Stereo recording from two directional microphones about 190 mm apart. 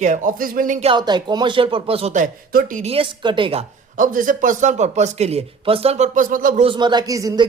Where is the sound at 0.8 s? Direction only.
25° right (ahead or behind).